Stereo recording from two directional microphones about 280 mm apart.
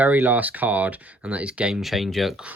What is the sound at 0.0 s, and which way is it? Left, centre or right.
Speech, centre.